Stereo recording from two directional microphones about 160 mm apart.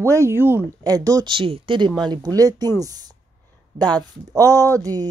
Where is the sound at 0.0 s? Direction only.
20° right (ahead or behind).